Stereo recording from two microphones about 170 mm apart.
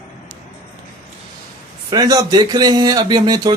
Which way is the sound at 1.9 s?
20° right (ahead or behind).